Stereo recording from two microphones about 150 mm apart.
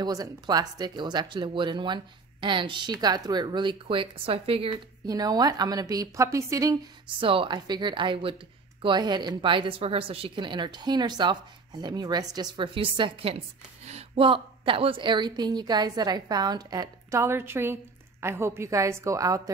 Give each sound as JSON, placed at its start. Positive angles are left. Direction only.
{"t": 0.0, "sound": "speech", "side_deg": -25}
{"t": 5.0, "sound": "a woman's voice", "side_deg": -25}
{"t": 7.2, "sound": "a woman's voice", "side_deg": -35}